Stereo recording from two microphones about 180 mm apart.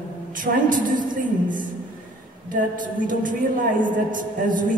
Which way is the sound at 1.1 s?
50° right (ahead or behind).